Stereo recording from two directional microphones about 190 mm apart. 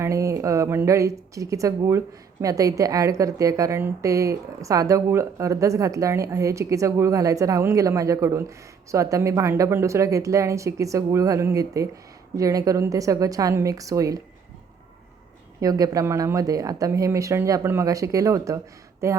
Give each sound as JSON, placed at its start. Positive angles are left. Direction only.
{"t": 0.0, "sound": "a woman's voice", "side_deg": -15}
{"t": 15.6, "sound": "a woman's voice", "side_deg": -20}